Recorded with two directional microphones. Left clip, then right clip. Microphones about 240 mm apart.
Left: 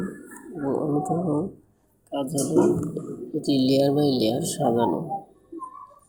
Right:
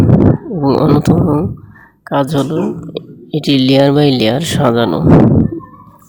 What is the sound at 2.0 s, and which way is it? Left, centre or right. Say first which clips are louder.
Speech: right 13 dB; right.